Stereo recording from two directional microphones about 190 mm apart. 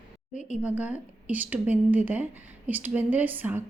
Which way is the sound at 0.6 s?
5° right (ahead or behind).